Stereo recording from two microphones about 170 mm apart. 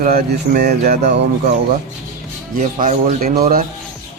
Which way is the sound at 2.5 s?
50° right (ahead or behind).